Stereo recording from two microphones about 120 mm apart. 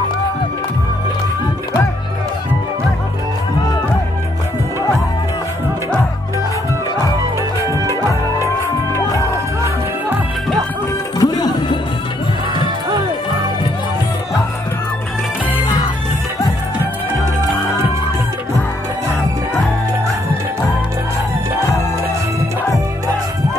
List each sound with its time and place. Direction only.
7.6 s music: 25° right (ahead or behind)
11.1 s music: 35° left (ahead or behind)